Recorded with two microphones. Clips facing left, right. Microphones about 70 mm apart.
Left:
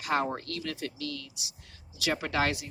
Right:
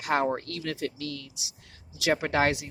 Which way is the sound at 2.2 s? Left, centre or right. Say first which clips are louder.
Right 3 dB; right.